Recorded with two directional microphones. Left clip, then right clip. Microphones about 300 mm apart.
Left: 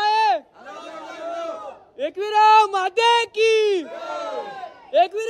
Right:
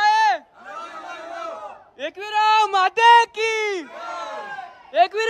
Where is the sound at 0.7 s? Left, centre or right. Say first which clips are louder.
Right 3 dB; centre.